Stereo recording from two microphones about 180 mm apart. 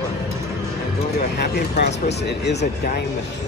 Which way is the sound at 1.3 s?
65° left (ahead or behind).